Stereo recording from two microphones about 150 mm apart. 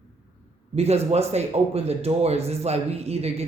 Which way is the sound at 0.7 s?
45° right (ahead or behind).